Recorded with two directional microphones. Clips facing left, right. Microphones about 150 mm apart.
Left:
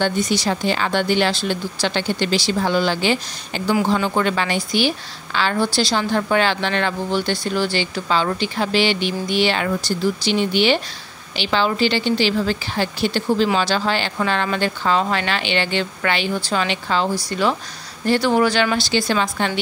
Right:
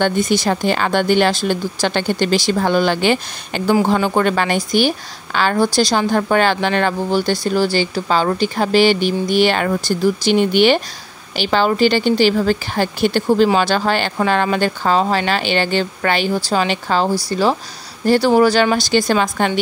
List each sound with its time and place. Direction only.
0.0 s a woman's voice: 50° right (ahead or behind)